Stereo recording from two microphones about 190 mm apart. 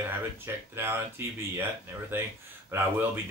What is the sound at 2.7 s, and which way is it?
Speech, 10° right (ahead or behind).